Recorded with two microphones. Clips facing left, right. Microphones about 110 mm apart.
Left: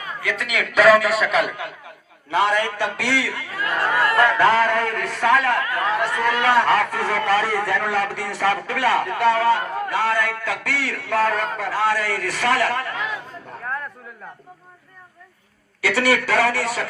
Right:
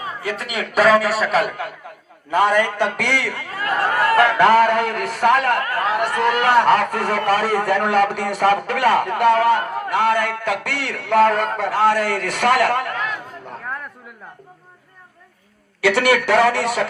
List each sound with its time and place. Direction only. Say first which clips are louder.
0.0 s a man's voice: right 1 dB; 35° right (ahead or behind)
2.3 s a man's voice: right 3 dB; 55° right (ahead or behind)
4.2 s a man's voice: right 4 dB; 70° right (ahead or behind)
15.8 s a man's voice: right 3 dB; 65° right (ahead or behind)